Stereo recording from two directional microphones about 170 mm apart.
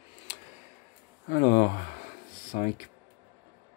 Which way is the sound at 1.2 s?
50° left (ahead or behind).